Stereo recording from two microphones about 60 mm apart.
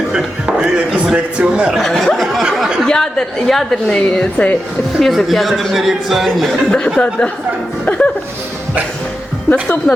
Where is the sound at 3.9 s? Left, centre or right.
Centre.